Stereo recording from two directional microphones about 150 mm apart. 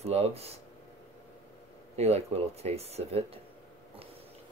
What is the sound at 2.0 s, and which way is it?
Speech, 45° right (ahead or behind).